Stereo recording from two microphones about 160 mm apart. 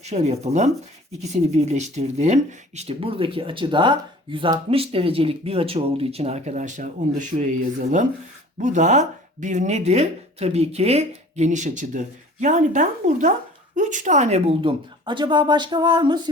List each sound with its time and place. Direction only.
0.0 s speech: 45° right (ahead or behind); by 16.3 s 25° right (ahead or behind)